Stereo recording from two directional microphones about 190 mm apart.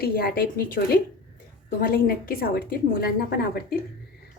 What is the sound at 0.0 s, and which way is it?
Speech, 50° left (ahead or behind).